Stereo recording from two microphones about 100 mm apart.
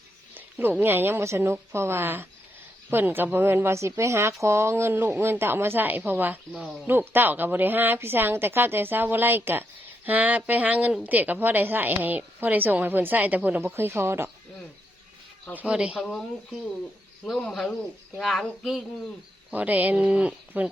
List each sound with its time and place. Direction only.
0.3 s a woman's voice: 20° right (ahead or behind)
6.5 s speech: 5° right (ahead or behind)
6.8 s a woman's voice: 20° right (ahead or behind)
15.5 s speech: 10° right (ahead or behind)
16.0 s speech: 5° left (ahead or behind)
19.5 s speech: 15° right (ahead or behind)